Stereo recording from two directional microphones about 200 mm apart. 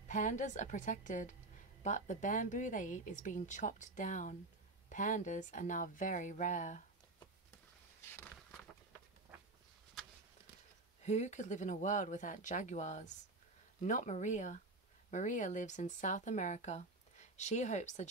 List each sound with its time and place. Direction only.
0.1 s speech: 40° left (ahead or behind)
8.1 s a sound: 10° left (ahead or behind)
11.1 s speech: 35° left (ahead or behind)